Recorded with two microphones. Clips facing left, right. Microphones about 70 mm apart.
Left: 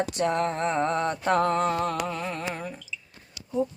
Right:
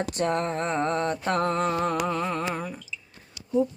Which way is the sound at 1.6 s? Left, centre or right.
Centre.